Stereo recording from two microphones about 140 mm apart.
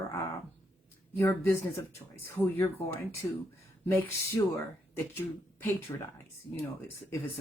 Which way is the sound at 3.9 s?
15° left (ahead or behind).